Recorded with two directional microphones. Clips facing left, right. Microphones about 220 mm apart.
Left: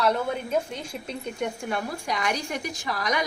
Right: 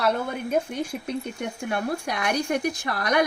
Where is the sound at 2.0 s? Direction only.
60° right (ahead or behind).